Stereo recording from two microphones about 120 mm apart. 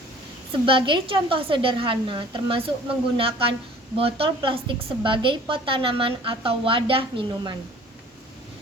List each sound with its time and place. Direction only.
0.6 s a woman's voice: 45° right (ahead or behind)